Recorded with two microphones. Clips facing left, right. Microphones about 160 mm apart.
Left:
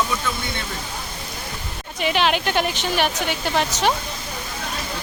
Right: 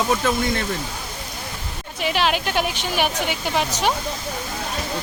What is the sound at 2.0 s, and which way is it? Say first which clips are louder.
A woman's voice: left 1 dB; centre (ahead or behind).